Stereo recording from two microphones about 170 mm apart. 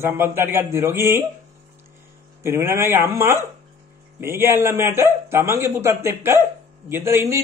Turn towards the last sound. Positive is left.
turn(degrees=-15)  # may be behind; listen again after turning